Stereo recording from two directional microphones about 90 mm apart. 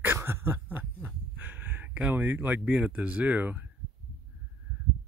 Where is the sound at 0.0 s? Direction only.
30° right (ahead or behind).